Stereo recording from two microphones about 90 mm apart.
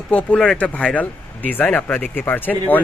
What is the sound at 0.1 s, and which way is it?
Speech, 15° left (ahead or behind).